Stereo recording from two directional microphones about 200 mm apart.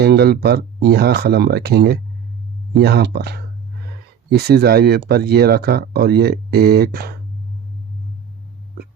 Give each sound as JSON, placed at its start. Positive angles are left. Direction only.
{"t": 0.0, "sound": "speech", "side_deg": -55}